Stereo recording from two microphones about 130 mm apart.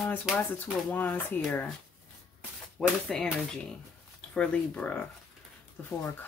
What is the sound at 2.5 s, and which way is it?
Speech, 5° left (ahead or behind).